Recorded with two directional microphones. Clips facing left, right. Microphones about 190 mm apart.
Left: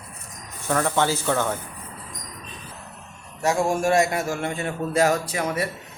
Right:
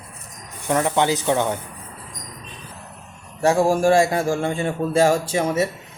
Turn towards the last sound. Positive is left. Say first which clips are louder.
# right 5 dB
turn(degrees=-25)  # may be behind; listen again after turning